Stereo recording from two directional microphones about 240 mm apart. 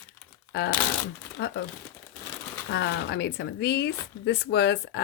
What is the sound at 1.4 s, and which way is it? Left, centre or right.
Speech, left.